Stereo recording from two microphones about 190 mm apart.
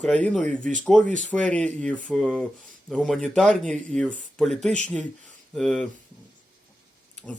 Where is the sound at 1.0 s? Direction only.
40° right (ahead or behind).